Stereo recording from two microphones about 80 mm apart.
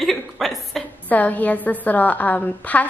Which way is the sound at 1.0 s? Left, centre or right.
Centre.